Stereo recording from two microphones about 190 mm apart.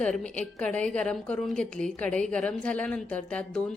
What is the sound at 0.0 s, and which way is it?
A woman's voice, 5° left (ahead or behind).